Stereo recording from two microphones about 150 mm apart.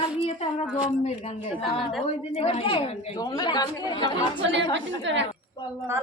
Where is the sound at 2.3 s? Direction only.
40° left (ahead or behind).